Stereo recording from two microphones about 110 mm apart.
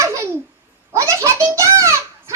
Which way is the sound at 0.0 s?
25° right (ahead or behind).